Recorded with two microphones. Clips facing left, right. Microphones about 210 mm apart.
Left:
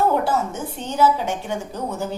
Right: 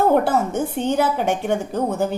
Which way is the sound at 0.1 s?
60° right (ahead or behind).